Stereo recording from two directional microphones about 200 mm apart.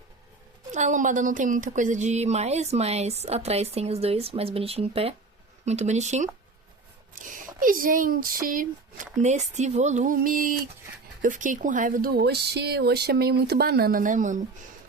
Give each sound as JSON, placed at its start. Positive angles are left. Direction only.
{"t": 0.7, "sound": "speech", "side_deg": -35}